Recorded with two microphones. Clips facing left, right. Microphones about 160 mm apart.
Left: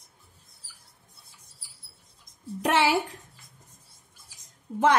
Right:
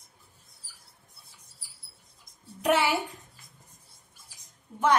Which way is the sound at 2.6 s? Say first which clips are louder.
Left 1 dB; 90° left.